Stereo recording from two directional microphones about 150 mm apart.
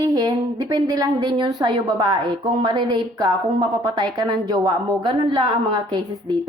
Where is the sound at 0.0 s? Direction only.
25° right (ahead or behind).